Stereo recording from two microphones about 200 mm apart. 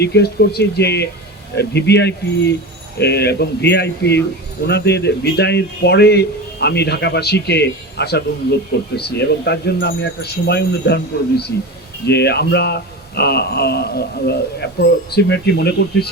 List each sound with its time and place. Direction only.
0.0 s speech: 55° left (ahead or behind)